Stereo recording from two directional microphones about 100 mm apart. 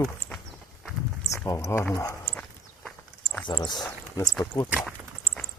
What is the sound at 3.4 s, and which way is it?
Speech, 55° left (ahead or behind).